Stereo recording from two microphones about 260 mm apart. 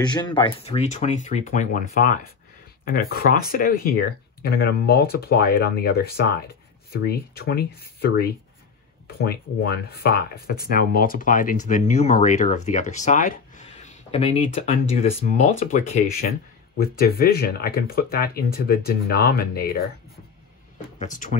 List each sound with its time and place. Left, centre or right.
0.0 s speech: centre; by 19.8 s left
21.0 s speech: left